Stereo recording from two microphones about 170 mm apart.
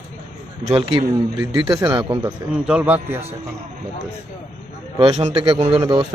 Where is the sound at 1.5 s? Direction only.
25° right (ahead or behind).